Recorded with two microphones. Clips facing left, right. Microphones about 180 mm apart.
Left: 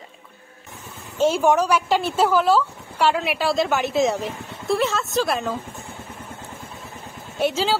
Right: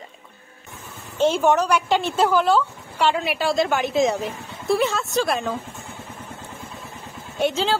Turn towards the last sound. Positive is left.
turn(degrees=5)  # may be behind; listen again after turning